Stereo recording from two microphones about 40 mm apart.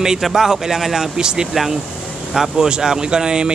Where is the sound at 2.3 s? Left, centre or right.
Centre.